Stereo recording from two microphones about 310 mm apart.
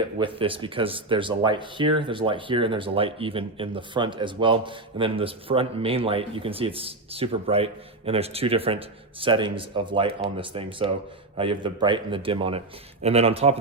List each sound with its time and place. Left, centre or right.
0.2 s speech: centre